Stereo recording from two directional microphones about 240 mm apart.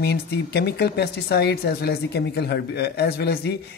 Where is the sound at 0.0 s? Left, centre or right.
Left.